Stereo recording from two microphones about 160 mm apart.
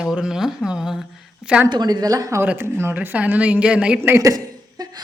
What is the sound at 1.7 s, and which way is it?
A woman's voice, 25° right (ahead or behind).